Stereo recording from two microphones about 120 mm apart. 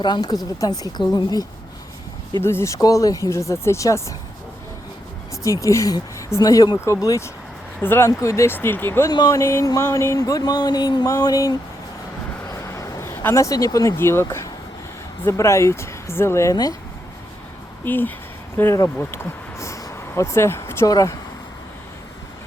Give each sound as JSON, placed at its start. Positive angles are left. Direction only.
{"t": 0.0, "sound": "speech", "side_deg": 35}
{"t": 2.4, "sound": "speech", "side_deg": 20}
{"t": 5.4, "sound": "speech", "side_deg": 25}
{"t": 9.0, "sound": "speech", "side_deg": 30}
{"t": 12.5, "sound": "a sound", "side_deg": 25}
{"t": 15.2, "sound": "speech", "side_deg": 25}
{"t": 17.8, "sound": "speech", "side_deg": 15}